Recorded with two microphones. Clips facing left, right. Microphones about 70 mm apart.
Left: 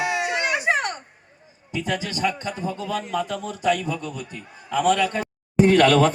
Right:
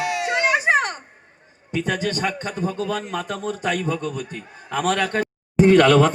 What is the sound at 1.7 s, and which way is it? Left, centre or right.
A man's voice, right.